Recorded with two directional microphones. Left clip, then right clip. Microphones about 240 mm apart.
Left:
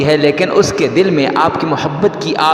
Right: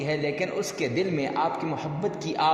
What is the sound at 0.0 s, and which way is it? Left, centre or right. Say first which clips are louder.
A man's voice: left 16 dB; left.